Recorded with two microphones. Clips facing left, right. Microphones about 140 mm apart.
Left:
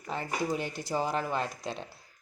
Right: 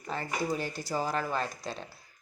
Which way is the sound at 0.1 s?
20° left (ahead or behind).